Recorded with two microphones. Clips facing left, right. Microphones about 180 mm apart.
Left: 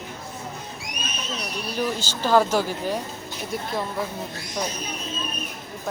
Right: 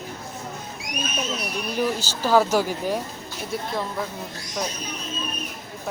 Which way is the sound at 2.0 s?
10° right (ahead or behind).